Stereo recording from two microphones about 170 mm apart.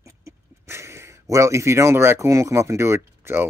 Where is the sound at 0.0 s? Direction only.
15° right (ahead or behind).